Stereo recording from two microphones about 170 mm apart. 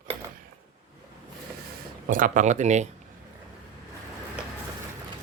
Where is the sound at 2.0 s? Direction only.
50° right (ahead or behind).